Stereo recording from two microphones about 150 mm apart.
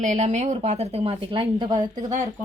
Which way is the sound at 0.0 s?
55° right (ahead or behind).